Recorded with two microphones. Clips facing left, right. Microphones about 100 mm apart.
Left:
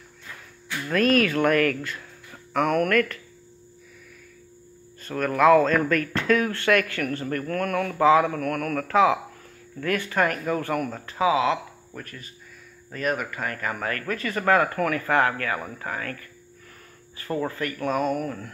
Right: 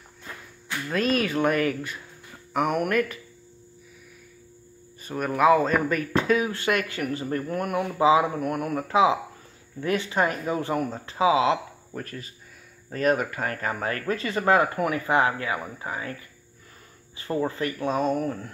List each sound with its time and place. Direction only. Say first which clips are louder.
0.8 s speech: left 4 dB; 5° right (ahead or behind)
5.0 s speech: left 2 dB; 10° right (ahead or behind); by 18.5 s 30° right (ahead or behind)